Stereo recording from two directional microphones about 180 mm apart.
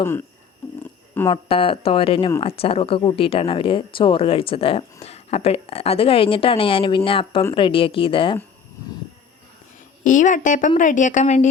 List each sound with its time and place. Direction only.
1.3 s a woman's voice: 30° left (ahead or behind)
10.0 s a woman's voice: 45° left (ahead or behind)